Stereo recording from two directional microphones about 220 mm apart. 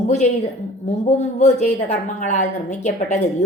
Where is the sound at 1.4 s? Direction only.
30° left (ahead or behind).